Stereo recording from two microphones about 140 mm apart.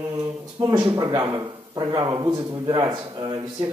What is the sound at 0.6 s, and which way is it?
Speech, 30° right (ahead or behind).